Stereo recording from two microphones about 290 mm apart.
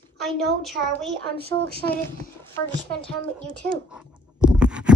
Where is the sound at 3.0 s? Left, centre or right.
Centre.